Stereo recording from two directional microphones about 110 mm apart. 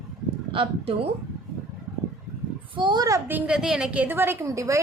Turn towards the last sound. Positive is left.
turn(degrees=-30)  # may be behind; listen again after turning